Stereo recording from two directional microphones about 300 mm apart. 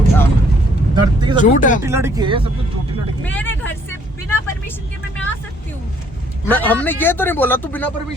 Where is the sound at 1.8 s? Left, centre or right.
Centre.